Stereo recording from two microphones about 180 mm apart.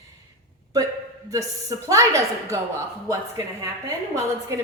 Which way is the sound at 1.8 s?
15° right (ahead or behind).